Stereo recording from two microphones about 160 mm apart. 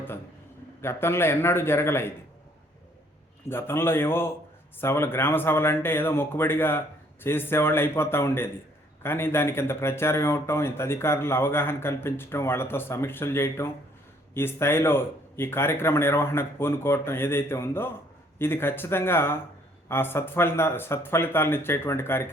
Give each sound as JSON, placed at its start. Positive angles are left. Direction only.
{"t": 0.8, "sound": "speech", "side_deg": 15}
{"t": 3.5, "sound": "speech", "side_deg": 15}